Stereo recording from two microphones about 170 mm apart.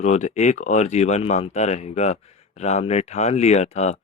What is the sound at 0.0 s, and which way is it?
Speech, 45° left (ahead or behind).